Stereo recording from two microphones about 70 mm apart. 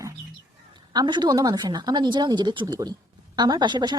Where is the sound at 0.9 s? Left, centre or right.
Right.